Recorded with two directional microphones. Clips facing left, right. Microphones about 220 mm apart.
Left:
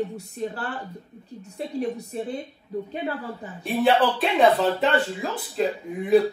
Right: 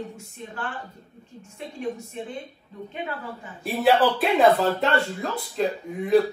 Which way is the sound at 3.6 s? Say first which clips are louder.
Right 1 dB; centre (ahead or behind).